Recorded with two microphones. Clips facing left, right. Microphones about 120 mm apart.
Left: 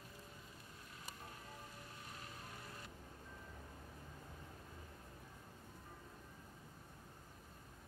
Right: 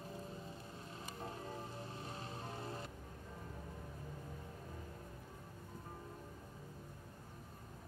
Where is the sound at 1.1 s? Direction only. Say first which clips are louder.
Right 9 dB; 35° right (ahead or behind).